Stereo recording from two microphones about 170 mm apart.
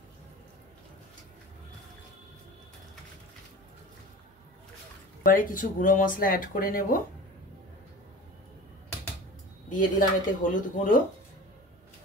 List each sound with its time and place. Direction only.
5.2 s speech: 55° left (ahead or behind)
9.7 s speech: 50° left (ahead or behind)